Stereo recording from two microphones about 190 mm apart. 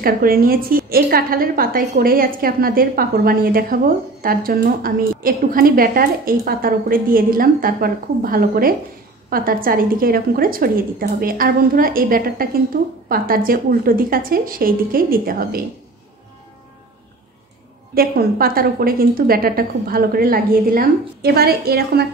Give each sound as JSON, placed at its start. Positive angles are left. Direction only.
{"t": 0.0, "sound": "a woman's voice", "side_deg": -50}
{"t": 17.9, "sound": "a woman's voice", "side_deg": -50}